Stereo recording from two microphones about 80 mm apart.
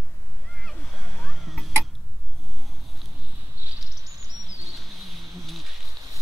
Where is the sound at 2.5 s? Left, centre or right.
Centre.